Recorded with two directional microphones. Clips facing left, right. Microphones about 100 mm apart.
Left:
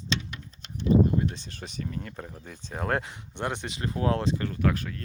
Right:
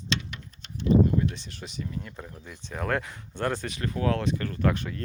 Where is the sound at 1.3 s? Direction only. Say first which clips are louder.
Even; 45° left (ahead or behind).